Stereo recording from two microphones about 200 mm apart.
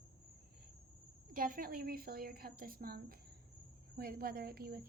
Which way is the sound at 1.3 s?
45° right (ahead or behind).